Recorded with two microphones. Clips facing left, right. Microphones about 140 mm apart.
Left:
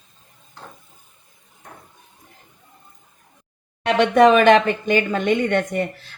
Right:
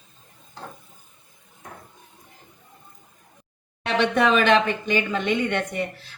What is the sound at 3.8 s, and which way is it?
Speech, 50° left (ahead or behind).